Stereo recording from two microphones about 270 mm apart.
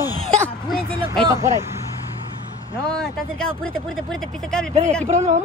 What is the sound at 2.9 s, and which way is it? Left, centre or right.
Speech, centre.